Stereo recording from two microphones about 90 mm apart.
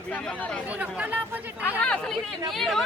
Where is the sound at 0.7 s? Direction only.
15° right (ahead or behind).